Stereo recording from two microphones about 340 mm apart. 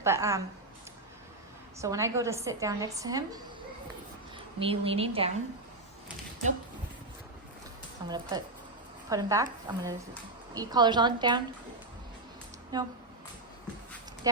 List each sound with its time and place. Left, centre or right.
0.0 s a woman's voice: centre
1.8 s a woman's voice: centre
4.6 s a woman's voice: centre
8.0 s a woman's voice: centre
12.7 s a woman's voice: centre